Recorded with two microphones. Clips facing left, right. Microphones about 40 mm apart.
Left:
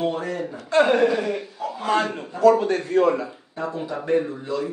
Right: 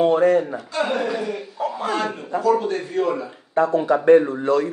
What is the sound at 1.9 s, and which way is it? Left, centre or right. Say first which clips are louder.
A man's voice: left 6 dB; centre.